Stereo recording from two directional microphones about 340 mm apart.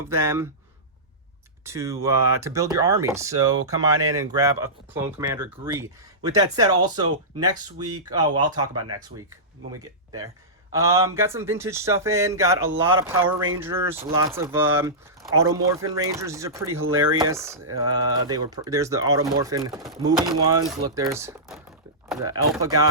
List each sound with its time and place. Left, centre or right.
0.1 s speech: centre
1.6 s speech: centre
3.5 s speech: right
4.2 s speech: centre
10.7 s speech: centre